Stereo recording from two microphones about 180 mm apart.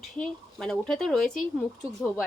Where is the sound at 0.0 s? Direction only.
5° left (ahead or behind).